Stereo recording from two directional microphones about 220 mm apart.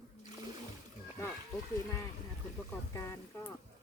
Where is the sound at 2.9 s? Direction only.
15° left (ahead or behind).